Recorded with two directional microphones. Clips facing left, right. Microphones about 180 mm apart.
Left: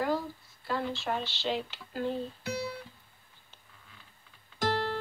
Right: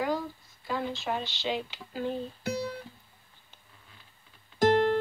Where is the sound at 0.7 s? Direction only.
5° right (ahead or behind).